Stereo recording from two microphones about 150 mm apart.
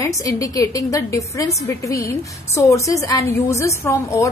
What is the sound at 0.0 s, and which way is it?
A woman's voice, 20° left (ahead or behind).